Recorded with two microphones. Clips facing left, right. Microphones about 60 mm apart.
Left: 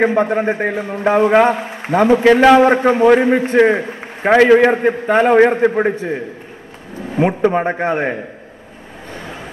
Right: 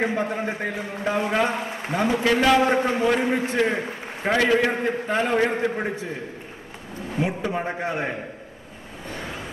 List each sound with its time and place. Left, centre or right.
0.0 s a man's voice: left
7.2 s a man's voice: left